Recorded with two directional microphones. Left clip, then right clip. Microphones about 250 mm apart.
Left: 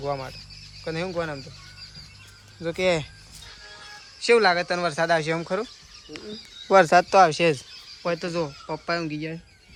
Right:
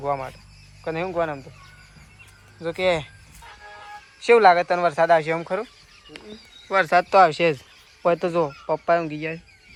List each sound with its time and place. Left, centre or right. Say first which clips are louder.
0.0 s speech: right 3 dB; centre
2.6 s speech: right 1 dB; centre
4.3 s speech: right 4 dB; centre
6.7 s speech: left 2 dB; centre
8.0 s speech: right 6 dB; centre